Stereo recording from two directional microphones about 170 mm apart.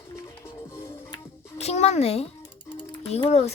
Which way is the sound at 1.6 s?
40° left (ahead or behind).